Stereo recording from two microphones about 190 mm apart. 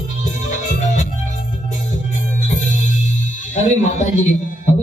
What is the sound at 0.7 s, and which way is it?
Music, 40° left (ahead or behind).